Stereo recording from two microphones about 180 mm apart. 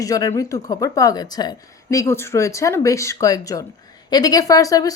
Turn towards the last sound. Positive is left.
turn(degrees=20)  # may be behind; listen again after turning